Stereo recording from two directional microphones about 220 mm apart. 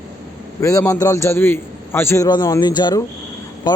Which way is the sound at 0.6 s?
15° left (ahead or behind).